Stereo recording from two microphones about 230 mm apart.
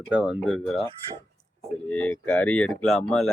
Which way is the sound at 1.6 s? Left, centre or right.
Centre.